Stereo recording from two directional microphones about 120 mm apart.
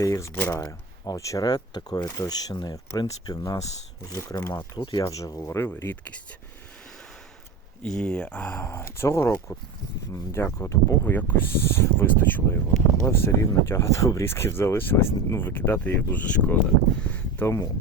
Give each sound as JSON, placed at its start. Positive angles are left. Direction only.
{"t": 0.0, "sound": "speech", "side_deg": 25}
{"t": 7.8, "sound": "speech", "side_deg": 5}